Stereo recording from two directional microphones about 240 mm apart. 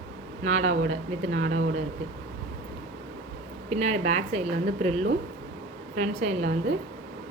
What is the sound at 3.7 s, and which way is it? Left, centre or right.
Speech, right.